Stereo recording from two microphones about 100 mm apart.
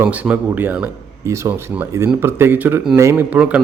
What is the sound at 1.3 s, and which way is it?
Speech, 30° right (ahead or behind).